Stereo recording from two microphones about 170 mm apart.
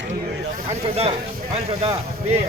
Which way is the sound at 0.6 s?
35° right (ahead or behind).